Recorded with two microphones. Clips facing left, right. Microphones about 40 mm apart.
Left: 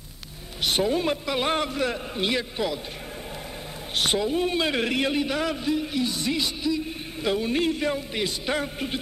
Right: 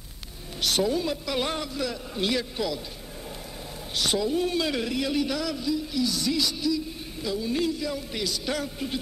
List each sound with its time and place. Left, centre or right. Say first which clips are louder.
0.6 s a woman's voice: left 1 dB; left
2.1 s a man's voice: right 2 dB; left
3.9 s speech: left 1 dB; left
4.8 s speech: left 3 dB; left
5.1 s a man's voice: left 1 dB; left
5.4 s speech: left 3 dB; left
6.0 s speech: even; left
7.2 s speech: left 3 dB; left
8.1 s speech: left 3 dB; left